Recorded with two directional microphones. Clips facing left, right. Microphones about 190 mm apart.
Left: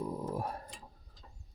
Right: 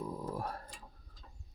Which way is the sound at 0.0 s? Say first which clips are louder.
Left 3 dB; 20° left (ahead or behind).